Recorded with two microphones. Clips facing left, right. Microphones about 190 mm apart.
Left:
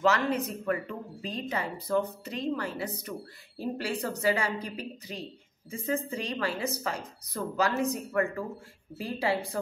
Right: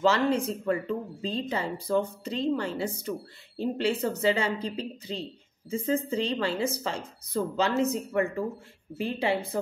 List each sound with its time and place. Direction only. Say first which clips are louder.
0.0 s speech: right 3 dB; 30° right (ahead or behind)